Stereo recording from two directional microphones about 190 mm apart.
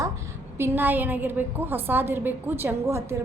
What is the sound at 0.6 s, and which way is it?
A woman's voice, 10° right (ahead or behind).